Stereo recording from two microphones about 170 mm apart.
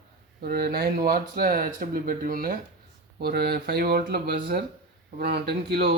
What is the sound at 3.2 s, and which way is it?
Speech, 70° right (ahead or behind).